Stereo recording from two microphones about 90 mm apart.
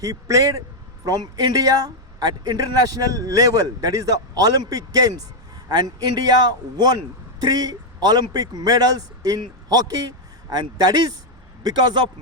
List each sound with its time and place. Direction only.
0.0 s a man's voice: 40° right (ahead or behind)